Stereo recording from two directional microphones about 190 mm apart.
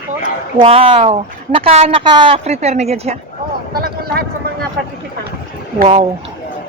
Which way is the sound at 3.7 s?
55° right (ahead or behind).